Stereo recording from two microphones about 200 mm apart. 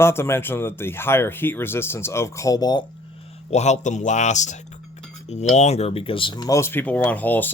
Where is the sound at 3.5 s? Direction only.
35° left (ahead or behind); by 7.4 s 10° left (ahead or behind).